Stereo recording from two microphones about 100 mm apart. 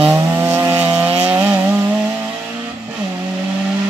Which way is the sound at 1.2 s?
15° right (ahead or behind).